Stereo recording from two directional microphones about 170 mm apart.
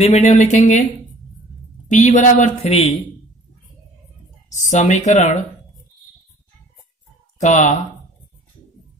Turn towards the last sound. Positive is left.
turn(degrees=45)  # may be behind; listen again after turning